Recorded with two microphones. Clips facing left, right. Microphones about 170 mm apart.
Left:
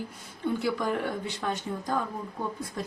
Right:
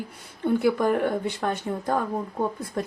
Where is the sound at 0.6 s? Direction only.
55° right (ahead or behind).